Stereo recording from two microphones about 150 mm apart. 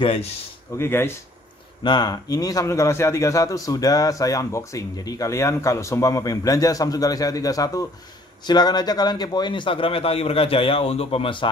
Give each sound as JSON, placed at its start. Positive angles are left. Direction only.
{"t": 0.0, "sound": "a man's voice", "side_deg": 40}
{"t": 0.7, "sound": "speech", "side_deg": 15}
{"t": 1.8, "sound": "a man's voice", "side_deg": 30}